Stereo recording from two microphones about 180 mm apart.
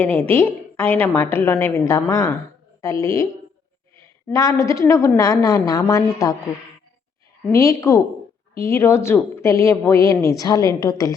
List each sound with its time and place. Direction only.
0.0 s a woman's voice: 10° left (ahead or behind)
7.5 s a woman's voice: 15° left (ahead or behind)